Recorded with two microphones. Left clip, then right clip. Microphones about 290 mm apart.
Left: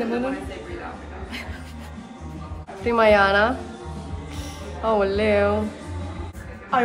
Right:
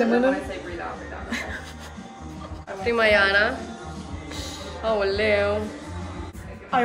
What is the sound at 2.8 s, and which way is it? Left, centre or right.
Speech, centre.